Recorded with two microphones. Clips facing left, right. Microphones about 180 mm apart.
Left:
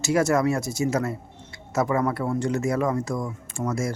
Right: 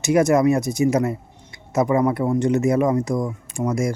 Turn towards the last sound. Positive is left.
turn(degrees=-15)  # may be behind; listen again after turning